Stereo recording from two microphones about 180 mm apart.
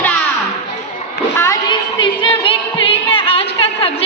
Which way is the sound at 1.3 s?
15° left (ahead or behind).